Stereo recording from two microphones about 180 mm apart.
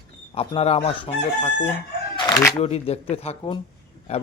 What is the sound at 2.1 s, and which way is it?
Chicken, 20° left (ahead or behind).